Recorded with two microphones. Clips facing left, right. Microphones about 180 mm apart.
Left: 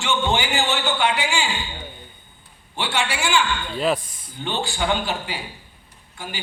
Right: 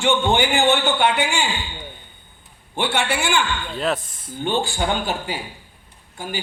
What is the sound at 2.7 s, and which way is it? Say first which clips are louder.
Speech: right 3 dB; 55° right (ahead or behind).